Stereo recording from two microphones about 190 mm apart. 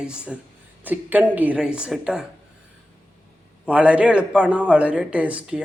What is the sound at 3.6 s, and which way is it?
A man's voice, 5° right (ahead or behind).